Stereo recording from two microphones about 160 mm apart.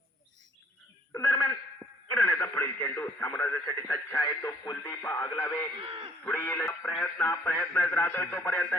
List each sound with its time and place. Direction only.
1.1 s a sound: 15° left (ahead or behind)
2.0 s speech: 10° left (ahead or behind)
5.8 s a man's voice: 35° right (ahead or behind)
6.2 s speech: 15° left (ahead or behind)